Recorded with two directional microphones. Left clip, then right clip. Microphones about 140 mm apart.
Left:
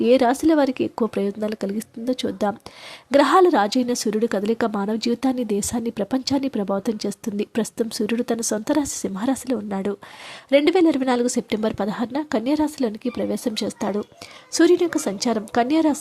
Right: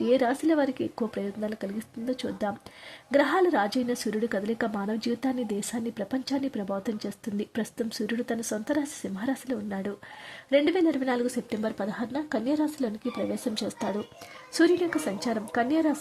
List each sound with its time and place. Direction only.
0.0 s a woman's voice: 30° left (ahead or behind)